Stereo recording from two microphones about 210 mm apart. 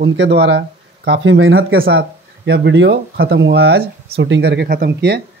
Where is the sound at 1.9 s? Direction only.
50° right (ahead or behind).